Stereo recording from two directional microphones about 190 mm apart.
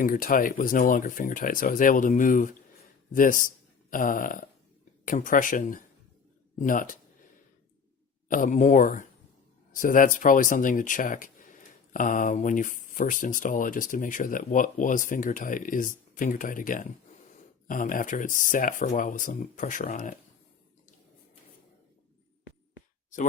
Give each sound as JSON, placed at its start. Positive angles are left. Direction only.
{"t": 0.0, "sound": "speech", "side_deg": 50}
{"t": 8.3, "sound": "speech", "side_deg": 45}